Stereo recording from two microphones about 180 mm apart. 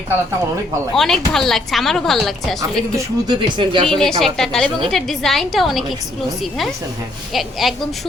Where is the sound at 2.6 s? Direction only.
20° right (ahead or behind).